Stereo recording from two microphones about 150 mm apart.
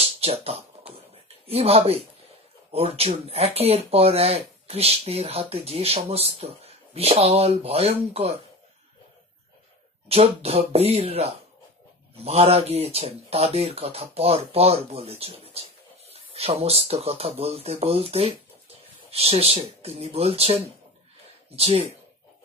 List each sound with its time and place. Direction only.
0.0 s a sound: 40° right (ahead or behind)
1.5 s speech: 40° right (ahead or behind)
10.0 s speech: 40° right (ahead or behind)